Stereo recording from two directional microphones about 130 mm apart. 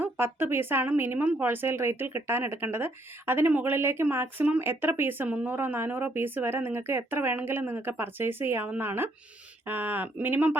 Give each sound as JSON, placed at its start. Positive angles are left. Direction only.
{"t": 0.0, "sound": "speech", "side_deg": -15}